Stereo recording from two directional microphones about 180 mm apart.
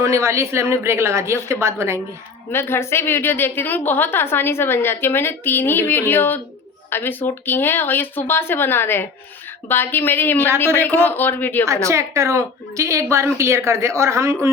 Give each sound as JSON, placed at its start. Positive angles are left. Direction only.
{"t": 0.0, "sound": "a woman's voice", "side_deg": -15}
{"t": 2.5, "sound": "a woman's voice", "side_deg": 15}
{"t": 11.6, "sound": "a woman's voice", "side_deg": -15}